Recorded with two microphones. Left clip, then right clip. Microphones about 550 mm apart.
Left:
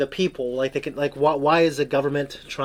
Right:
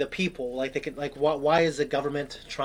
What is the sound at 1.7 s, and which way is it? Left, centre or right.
Speech, left.